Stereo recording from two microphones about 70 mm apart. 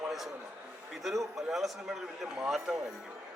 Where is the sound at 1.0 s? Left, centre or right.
Centre.